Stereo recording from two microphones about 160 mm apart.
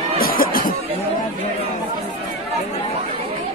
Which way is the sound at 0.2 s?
65° left (ahead or behind).